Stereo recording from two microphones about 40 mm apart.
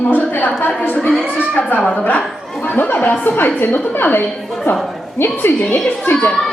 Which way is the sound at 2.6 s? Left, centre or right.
Left.